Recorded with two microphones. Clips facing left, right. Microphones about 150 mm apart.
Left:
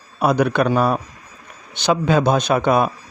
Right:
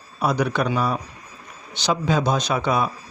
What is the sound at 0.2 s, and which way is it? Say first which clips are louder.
Speech: left 5 dB; 55° left (ahead or behind).